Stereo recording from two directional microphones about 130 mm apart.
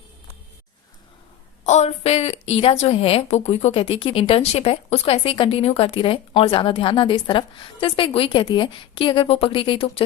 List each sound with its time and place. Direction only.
1.6 s a woman's voice: 60° left (ahead or behind); by 10.0 s 40° left (ahead or behind)